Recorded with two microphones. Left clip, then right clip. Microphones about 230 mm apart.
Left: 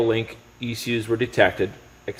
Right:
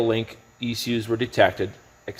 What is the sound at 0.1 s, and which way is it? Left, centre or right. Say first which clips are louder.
Speech: left 1 dB; right.